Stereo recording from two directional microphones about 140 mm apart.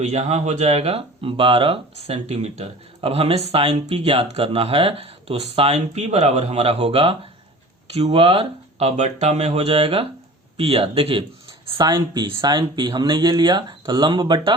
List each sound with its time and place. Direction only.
0.0 s speech: 55° right (ahead or behind); by 14.5 s 30° right (ahead or behind)